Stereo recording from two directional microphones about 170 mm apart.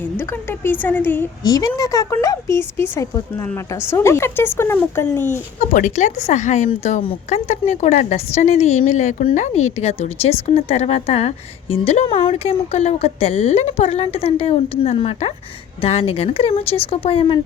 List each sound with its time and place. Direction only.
0.2 s a woman's voice: 10° left (ahead or behind)
5.7 s speech: 45° left (ahead or behind)
7.0 s speech: 35° left (ahead or behind)